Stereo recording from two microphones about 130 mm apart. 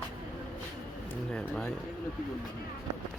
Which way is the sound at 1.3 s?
10° left (ahead or behind).